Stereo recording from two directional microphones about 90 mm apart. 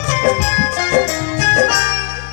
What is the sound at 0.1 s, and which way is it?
Music, 20° right (ahead or behind).